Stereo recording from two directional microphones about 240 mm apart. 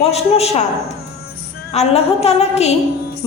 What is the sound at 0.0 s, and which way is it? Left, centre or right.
Music, left.